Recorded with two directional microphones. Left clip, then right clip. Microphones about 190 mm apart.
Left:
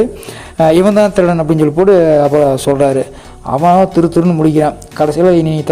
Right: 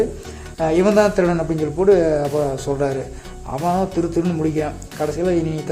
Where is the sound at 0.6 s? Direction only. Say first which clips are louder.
Left 7 dB; 50° left (ahead or behind).